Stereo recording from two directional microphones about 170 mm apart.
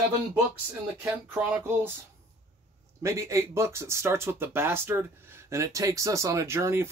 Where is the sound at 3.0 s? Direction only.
15° right (ahead or behind).